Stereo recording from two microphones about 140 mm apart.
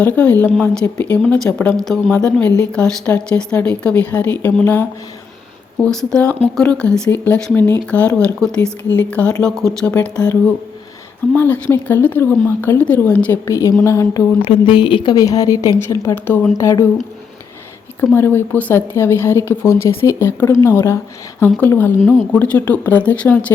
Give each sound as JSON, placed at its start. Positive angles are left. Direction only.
{"t": 0.0, "sound": "speech", "side_deg": 10}
{"t": 13.5, "sound": "speech", "side_deg": 20}
{"t": 14.4, "sound": "a woman's voice", "side_deg": 40}
{"t": 18.1, "sound": "speech", "side_deg": 15}